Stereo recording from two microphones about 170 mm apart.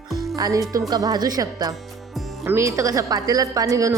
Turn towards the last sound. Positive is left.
turn(degrees=-20)  # may be behind; listen again after turning